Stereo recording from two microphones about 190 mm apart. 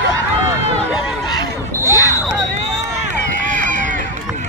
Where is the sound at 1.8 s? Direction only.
15° left (ahead or behind).